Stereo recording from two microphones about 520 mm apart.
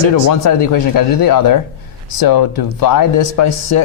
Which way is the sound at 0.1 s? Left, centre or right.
Left.